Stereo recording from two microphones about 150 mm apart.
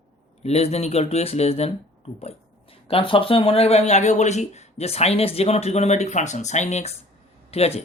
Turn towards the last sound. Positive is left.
turn(degrees=45)  # may be behind; listen again after turning